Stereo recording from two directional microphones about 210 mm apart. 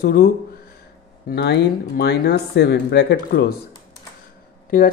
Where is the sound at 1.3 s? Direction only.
50° left (ahead or behind).